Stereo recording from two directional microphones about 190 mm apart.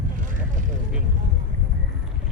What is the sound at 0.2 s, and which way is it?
Vehicle, 45° right (ahead or behind).